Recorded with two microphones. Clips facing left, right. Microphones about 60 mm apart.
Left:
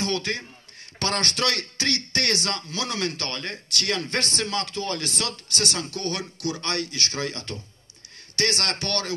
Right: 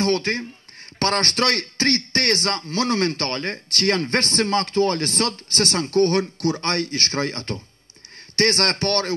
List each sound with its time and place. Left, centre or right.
0.0 s speech: right